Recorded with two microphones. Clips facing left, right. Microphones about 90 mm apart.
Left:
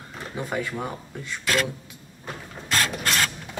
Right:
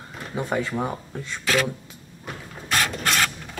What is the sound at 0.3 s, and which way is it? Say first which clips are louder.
Speech: right 3 dB; 25° right (ahead or behind).